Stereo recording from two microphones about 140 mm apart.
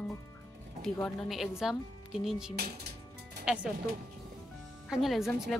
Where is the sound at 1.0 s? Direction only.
Centre (ahead or behind).